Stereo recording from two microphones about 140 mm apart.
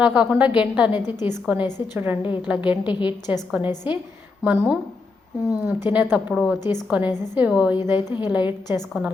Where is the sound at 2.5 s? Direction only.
10° right (ahead or behind).